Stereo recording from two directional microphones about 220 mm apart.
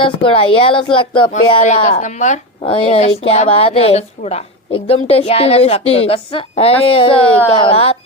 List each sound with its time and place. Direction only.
0.0 s speech: 25° left (ahead or behind)